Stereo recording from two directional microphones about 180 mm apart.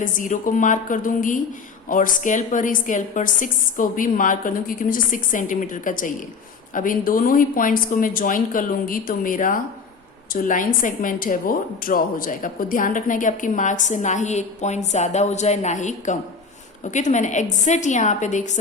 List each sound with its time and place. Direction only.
0.0 s a woman's voice: 45° left (ahead or behind)